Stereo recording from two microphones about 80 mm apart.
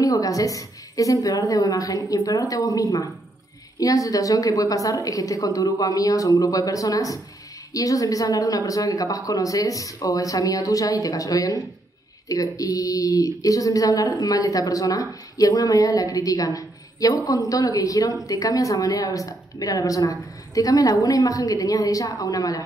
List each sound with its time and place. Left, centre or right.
0.0 s speech: left